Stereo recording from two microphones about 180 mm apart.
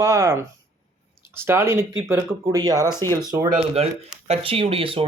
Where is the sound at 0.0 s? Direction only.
15° right (ahead or behind).